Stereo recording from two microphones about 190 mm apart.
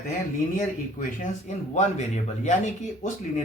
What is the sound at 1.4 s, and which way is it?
Speech, 40° left (ahead or behind).